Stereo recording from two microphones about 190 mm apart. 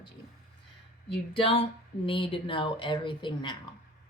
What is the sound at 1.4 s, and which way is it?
A woman's voice, 30° left (ahead or behind).